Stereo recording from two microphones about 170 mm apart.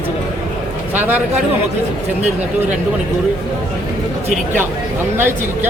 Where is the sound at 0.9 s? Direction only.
10° right (ahead or behind).